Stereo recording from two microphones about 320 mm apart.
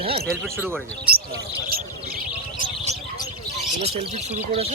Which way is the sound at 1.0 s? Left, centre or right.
Right.